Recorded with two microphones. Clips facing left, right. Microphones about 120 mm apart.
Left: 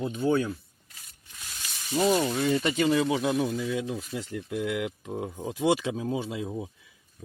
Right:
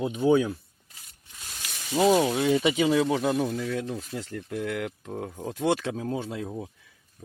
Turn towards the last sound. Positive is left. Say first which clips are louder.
# left 1 dB
turn(degrees=5)  # may be behind; listen again after turning